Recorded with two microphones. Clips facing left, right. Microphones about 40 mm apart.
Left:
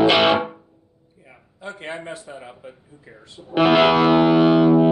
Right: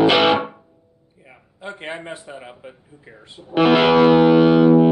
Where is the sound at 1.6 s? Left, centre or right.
Centre.